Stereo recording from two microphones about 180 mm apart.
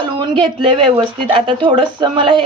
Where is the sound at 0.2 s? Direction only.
25° right (ahead or behind).